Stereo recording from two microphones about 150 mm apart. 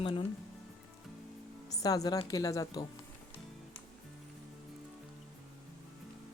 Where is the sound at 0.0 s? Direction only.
35° left (ahead or behind).